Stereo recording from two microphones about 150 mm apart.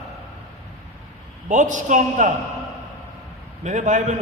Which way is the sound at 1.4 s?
55° right (ahead or behind).